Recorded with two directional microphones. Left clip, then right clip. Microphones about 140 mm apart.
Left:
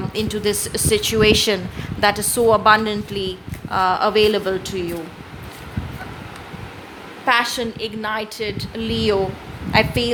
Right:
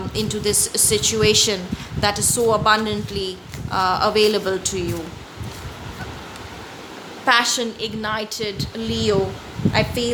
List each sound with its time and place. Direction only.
0.1 s a woman's voice: 25° left (ahead or behind)
7.3 s a woman's voice: 5° left (ahead or behind)